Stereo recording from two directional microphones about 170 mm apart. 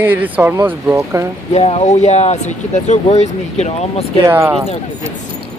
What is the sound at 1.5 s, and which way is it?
Speech, 40° left (ahead or behind).